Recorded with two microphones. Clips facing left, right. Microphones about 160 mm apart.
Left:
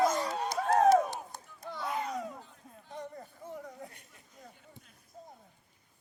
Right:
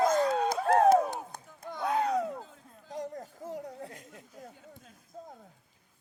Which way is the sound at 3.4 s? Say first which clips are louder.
Right 4 dB; 75° right (ahead or behind).